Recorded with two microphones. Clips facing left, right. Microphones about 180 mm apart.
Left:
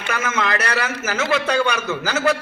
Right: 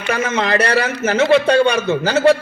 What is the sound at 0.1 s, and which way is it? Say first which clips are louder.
A man's voice: right 5 dB; 30° right (ahead or behind).